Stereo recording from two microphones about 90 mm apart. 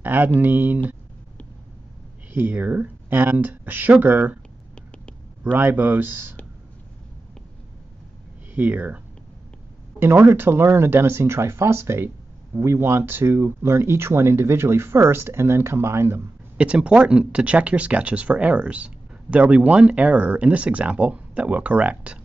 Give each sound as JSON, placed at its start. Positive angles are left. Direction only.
{"t": 0.0, "sound": "a sound", "side_deg": -20}
{"t": 0.4, "sound": "speech", "side_deg": -20}
{"t": 2.3, "sound": "speech", "side_deg": -20}
{"t": 5.4, "sound": "speech", "side_deg": -20}
{"t": 8.5, "sound": "speech", "side_deg": -20}
{"t": 16.5, "sound": "speech", "side_deg": -10}